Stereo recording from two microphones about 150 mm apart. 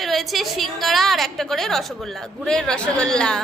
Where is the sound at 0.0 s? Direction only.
Centre (ahead or behind).